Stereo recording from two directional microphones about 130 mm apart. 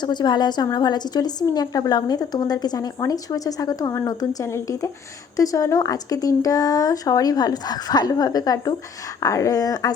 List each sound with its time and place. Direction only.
0.0 s a woman's voice: 35° left (ahead or behind)